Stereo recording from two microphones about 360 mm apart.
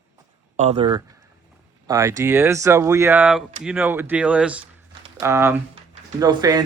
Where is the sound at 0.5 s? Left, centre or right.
Centre.